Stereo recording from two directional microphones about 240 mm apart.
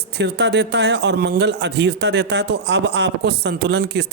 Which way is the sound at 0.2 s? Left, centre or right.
Right.